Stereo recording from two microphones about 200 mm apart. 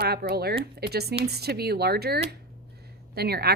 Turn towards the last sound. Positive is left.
turn(degrees=-50)  # may be behind; listen again after turning